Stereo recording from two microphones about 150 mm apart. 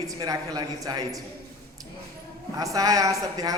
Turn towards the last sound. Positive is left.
turn(degrees=-25)  # may be behind; listen again after turning